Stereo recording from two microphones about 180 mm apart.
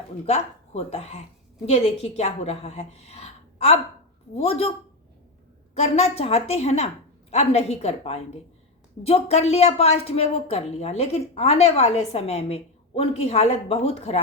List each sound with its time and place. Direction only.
0.3 s a woman's voice: 35° left (ahead or behind)
5.7 s a woman's voice: 35° left (ahead or behind)